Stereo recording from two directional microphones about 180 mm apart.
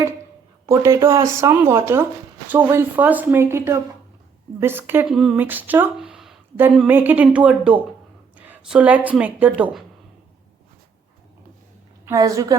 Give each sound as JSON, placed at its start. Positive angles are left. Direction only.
{"t": 0.6, "sound": "a woman's voice", "side_deg": -15}
{"t": 12.0, "sound": "a woman's voice", "side_deg": -20}